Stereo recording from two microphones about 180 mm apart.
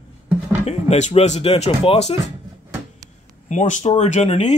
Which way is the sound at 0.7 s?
40° left (ahead or behind).